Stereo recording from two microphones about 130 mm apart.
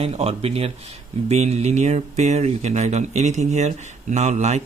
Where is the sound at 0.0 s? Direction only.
50° right (ahead or behind).